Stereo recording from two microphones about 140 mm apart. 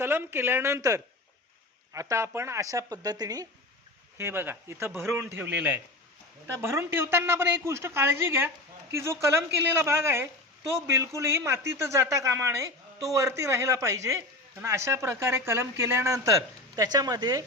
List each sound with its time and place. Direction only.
0.0 s speech: 15° right (ahead or behind)
4.2 s speech: 15° right (ahead or behind)